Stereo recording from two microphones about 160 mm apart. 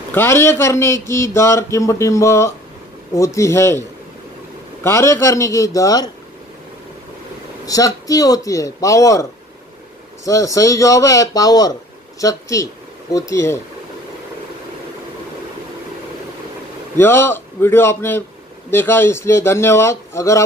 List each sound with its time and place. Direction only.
0.1 s a man's voice: 15° left (ahead or behind)
4.8 s a man's voice: 15° left (ahead or behind)
7.6 s a man's voice: 20° left (ahead or behind)
16.9 s a man's voice: 15° left (ahead or behind)